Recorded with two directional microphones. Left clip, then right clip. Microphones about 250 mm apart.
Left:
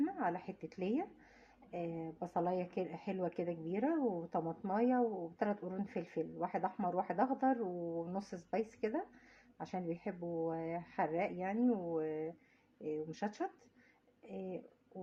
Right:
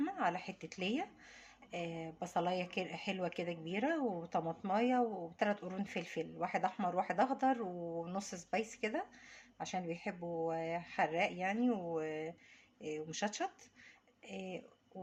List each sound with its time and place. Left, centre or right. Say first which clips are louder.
0.0 s speech: right 1 dB; right